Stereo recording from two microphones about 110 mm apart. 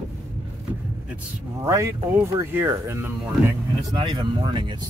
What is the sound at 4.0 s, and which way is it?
Speech, 50° right (ahead or behind).